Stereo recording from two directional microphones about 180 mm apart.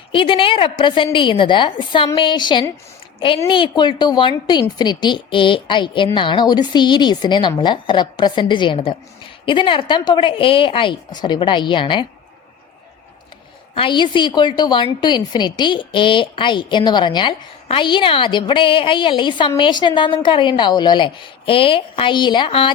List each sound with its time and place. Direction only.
0.1 s a woman's voice: 30° left (ahead or behind)
13.7 s a woman's voice: 25° left (ahead or behind)